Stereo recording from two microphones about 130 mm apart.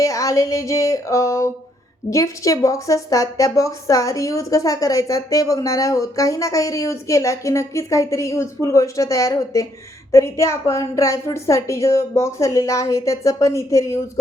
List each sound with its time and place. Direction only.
0.0 s a woman's voice: 25° left (ahead or behind)